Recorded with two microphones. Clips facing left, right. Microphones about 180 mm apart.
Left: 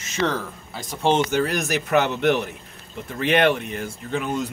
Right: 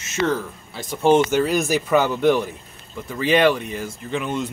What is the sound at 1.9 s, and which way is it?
Speech, 75° left (ahead or behind).